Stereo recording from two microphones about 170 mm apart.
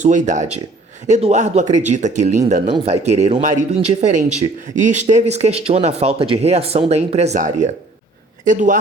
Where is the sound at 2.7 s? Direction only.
40° right (ahead or behind).